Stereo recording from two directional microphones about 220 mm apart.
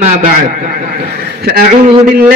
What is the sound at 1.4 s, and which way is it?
Speech, 45° right (ahead or behind).